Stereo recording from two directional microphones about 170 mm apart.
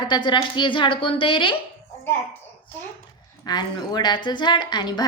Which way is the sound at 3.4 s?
25° left (ahead or behind).